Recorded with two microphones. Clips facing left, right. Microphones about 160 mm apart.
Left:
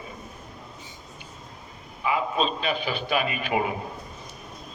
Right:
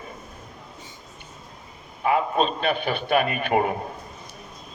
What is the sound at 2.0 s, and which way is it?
A man's voice, 55° right (ahead or behind).